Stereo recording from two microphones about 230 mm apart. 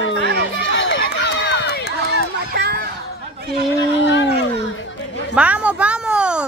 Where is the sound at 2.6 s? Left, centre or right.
Right.